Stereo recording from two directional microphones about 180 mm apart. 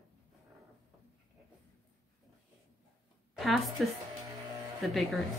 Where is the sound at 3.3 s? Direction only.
Centre (ahead or behind).